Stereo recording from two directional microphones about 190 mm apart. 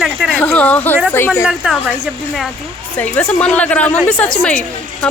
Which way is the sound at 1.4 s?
5° right (ahead or behind).